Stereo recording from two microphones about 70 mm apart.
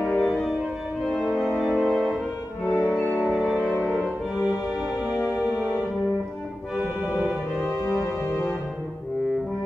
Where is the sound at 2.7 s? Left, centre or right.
Left.